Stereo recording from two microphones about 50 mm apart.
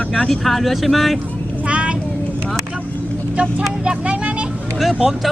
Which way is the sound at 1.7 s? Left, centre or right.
Right.